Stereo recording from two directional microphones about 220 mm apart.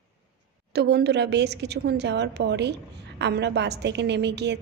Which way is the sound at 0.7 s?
50° right (ahead or behind).